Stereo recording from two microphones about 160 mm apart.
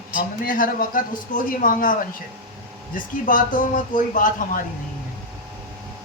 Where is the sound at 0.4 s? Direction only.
60° left (ahead or behind).